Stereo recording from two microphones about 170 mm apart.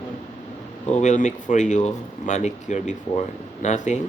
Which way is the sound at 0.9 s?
45° left (ahead or behind).